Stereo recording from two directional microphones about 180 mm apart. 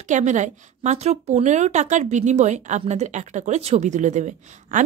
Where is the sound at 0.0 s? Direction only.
40° right (ahead or behind).